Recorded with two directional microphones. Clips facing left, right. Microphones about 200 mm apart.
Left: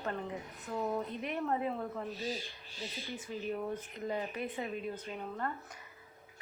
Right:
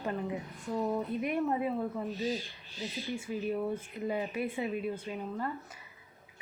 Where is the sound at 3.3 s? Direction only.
5° right (ahead or behind).